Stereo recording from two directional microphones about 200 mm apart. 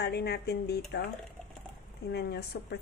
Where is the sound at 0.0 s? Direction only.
55° left (ahead or behind).